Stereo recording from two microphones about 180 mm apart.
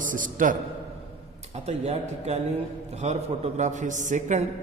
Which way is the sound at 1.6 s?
35° right (ahead or behind).